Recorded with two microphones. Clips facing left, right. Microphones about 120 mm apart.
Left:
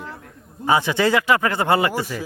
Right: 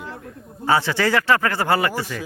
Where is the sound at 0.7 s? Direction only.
15° left (ahead or behind).